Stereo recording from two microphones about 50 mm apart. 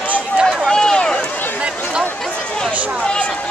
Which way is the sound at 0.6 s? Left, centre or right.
Centre.